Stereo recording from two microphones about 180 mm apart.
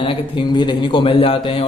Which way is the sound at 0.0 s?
25° left (ahead or behind).